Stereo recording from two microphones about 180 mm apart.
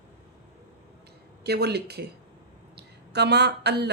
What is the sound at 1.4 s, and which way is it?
Speech, 65° right (ahead or behind).